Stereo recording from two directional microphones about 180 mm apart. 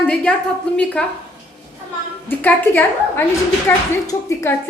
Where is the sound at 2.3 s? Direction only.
10° left (ahead or behind).